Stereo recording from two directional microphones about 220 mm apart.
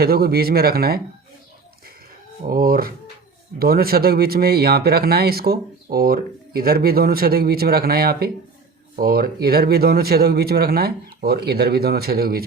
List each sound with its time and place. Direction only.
0.0 s speech: 45° right (ahead or behind)
2.5 s speech: 40° right (ahead or behind)